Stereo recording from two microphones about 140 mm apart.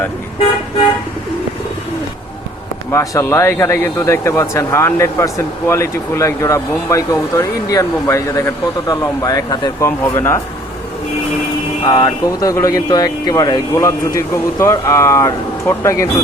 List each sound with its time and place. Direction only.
2.9 s speech: 20° left (ahead or behind)
10.0 s speech: 15° left (ahead or behind)
11.8 s speech: 35° left (ahead or behind)